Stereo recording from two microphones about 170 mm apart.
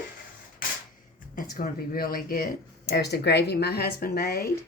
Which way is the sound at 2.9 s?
75° left (ahead or behind).